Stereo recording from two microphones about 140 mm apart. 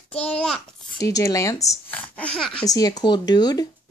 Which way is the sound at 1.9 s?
10° left (ahead or behind).